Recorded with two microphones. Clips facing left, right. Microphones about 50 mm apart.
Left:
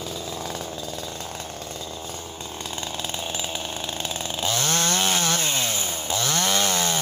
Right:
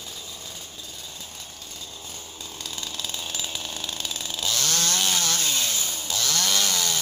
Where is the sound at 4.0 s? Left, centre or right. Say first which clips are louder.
Left 4 dB; left.